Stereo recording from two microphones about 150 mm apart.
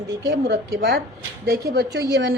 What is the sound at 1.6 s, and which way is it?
Speech, 90° right.